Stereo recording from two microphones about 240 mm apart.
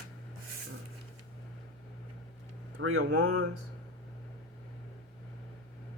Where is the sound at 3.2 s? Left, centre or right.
Right.